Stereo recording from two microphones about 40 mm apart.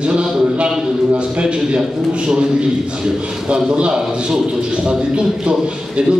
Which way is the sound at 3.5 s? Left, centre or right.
Right.